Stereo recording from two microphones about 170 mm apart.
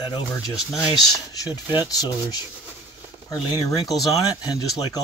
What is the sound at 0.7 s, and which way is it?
Speech, 20° left (ahead or behind).